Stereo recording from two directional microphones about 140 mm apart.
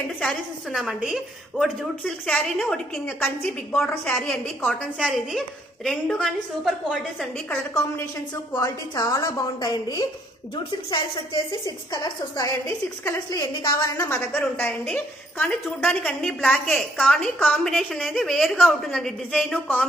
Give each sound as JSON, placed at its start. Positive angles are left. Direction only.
{"t": 0.2, "sound": "a woman's voice", "side_deg": 0}
{"t": 7.5, "sound": "a woman's voice", "side_deg": 20}
{"t": 11.6, "sound": "a woman's voice", "side_deg": 25}
{"t": 13.9, "sound": "a woman's voice", "side_deg": 20}